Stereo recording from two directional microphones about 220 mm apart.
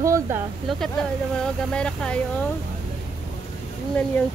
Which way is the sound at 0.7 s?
Centre (ahead or behind).